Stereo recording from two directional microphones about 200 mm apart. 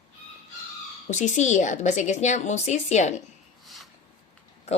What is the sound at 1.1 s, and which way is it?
Speech, 35° left (ahead or behind).